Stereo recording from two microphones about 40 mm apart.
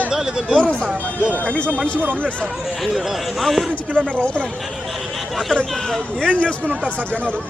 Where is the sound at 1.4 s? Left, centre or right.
Left.